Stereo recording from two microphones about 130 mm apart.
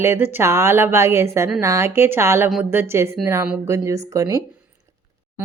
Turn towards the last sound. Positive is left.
turn(degrees=-25)  # may be behind; listen again after turning